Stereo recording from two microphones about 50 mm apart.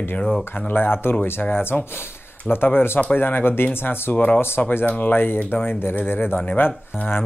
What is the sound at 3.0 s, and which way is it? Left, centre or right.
Speech, left.